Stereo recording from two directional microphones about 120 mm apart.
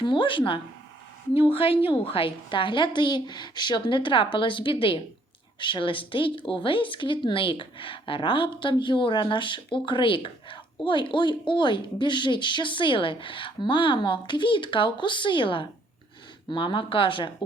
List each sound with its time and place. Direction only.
0.0 s a woman's voice: 45° left (ahead or behind)